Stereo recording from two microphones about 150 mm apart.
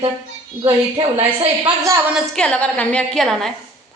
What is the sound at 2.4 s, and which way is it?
A woman's voice, 5° left (ahead or behind).